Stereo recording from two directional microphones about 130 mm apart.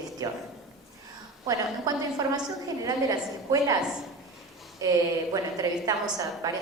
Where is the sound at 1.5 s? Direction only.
25° right (ahead or behind).